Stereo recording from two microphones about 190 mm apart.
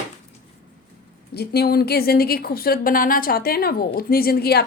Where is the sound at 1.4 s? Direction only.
55° left (ahead or behind).